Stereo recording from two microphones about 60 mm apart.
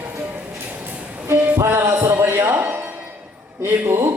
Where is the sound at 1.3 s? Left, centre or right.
Right.